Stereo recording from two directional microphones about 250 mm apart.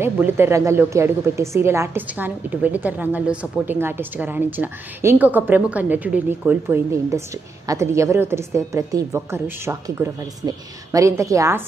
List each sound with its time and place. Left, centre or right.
0.0 s a woman's voice: centre